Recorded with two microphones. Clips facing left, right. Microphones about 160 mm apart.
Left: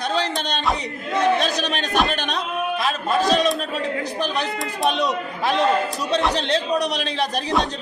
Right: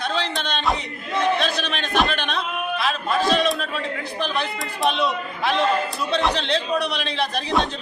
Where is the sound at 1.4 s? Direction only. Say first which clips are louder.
Left 2 dB; 40° left (ahead or behind).